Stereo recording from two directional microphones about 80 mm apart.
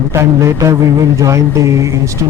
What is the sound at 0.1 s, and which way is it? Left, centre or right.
Speech, right.